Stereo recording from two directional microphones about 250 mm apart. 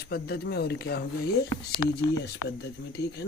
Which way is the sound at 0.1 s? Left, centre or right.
Left.